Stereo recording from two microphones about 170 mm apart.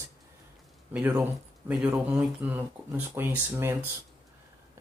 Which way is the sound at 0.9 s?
10° right (ahead or behind).